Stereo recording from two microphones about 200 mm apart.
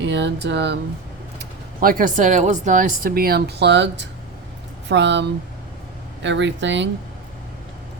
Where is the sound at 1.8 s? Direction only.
45° right (ahead or behind); by 6.9 s 65° right (ahead or behind).